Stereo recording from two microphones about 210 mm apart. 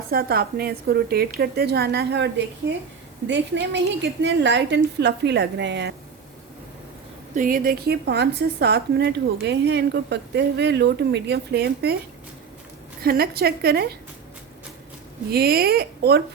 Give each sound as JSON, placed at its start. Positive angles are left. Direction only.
{"t": 0.1, "sound": "a woman's voice", "side_deg": -45}
{"t": 7.3, "sound": "speech", "side_deg": -40}
{"t": 13.0, "sound": "speech", "side_deg": -45}
{"t": 15.3, "sound": "speech", "side_deg": -45}